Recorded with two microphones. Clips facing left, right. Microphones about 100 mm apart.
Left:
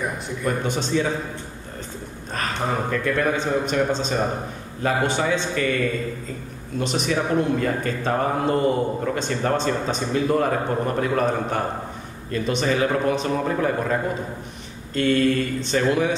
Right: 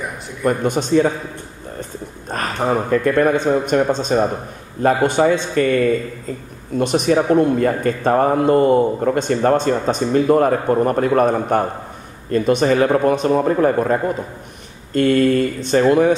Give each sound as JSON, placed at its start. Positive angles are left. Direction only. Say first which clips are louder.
{"t": 0.4, "sound": "speech", "louder": "right 7 dB", "side_deg": -50}
{"t": 2.3, "sound": "speech", "louder": "right 6 dB", "side_deg": -40}
{"t": 6.8, "sound": "speech", "louder": "right 8 dB", "side_deg": -50}
{"t": 15.0, "sound": "speech", "louder": "right 5 dB", "side_deg": -45}